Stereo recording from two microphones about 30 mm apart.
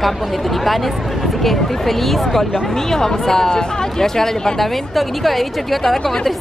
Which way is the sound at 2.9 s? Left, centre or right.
Centre.